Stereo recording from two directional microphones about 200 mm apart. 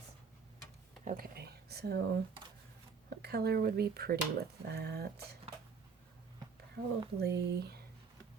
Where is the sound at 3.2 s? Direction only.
50° right (ahead or behind).